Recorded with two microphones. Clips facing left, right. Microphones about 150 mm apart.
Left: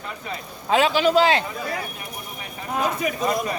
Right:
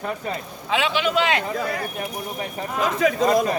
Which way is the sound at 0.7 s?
40° left (ahead or behind).